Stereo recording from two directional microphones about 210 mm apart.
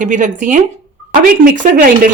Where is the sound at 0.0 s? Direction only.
35° right (ahead or behind).